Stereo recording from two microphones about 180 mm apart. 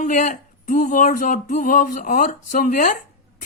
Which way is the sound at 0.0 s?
45° left (ahead or behind).